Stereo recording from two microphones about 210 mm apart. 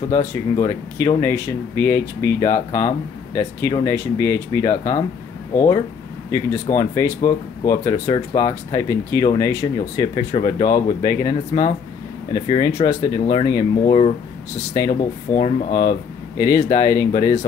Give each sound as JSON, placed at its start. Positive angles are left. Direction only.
{"t": 0.1, "sound": "speech", "side_deg": 15}
{"t": 16.3, "sound": "speech", "side_deg": 15}